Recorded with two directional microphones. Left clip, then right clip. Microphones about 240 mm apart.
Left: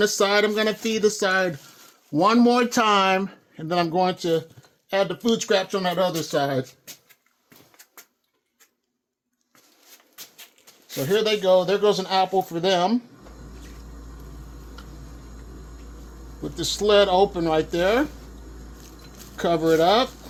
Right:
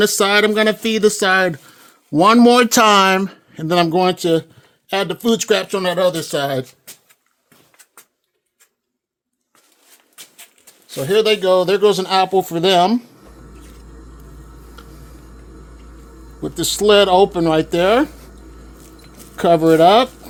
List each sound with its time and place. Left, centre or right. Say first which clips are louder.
0.0 s speech: right 6 dB; right
11.1 s speech: right 5 dB; right
16.4 s speech: right 7 dB; right
19.4 s speech: right 8 dB; right